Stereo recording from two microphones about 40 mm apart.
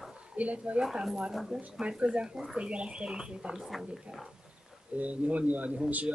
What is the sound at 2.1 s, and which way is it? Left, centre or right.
Speech, right.